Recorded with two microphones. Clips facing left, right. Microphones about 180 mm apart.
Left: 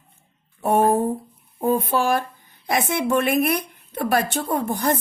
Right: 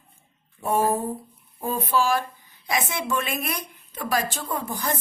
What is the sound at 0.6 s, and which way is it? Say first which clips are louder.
A woman's voice: left 5 dB; 60° left (ahead or behind).